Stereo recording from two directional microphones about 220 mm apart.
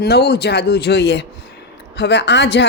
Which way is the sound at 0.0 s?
45° left (ahead or behind).